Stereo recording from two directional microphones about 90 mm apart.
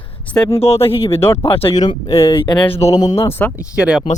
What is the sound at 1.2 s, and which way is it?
Speech, 25° left (ahead or behind).